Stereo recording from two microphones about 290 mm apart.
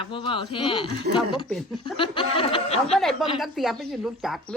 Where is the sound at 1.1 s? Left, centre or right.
Right.